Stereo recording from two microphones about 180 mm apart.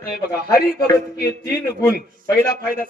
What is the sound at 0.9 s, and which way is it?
A man's voice, 15° left (ahead or behind).